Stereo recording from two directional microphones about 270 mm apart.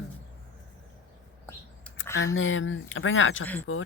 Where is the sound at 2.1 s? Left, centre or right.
Left.